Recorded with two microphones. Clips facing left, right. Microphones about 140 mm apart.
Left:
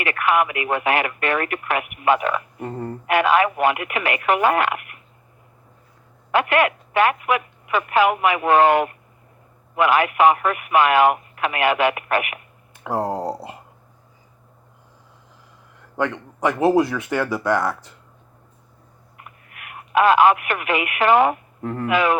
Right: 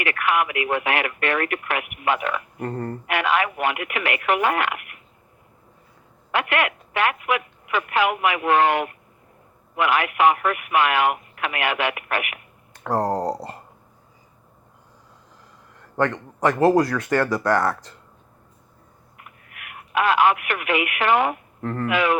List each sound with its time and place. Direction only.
0.1 s telephone: 35° left (ahead or behind)
0.9 s speech: 40° left (ahead or behind)
2.6 s a sound: 5° left (ahead or behind)
3.1 s speech: 40° left (ahead or behind)
6.3 s speech: 40° left (ahead or behind)
12.8 s a sound: 5° left (ahead or behind)
16.0 s a man's voice: 5° left (ahead or behind)
19.6 s speech: 35° left (ahead or behind)
21.6 s speech: 10° left (ahead or behind)
21.8 s speech: 35° left (ahead or behind)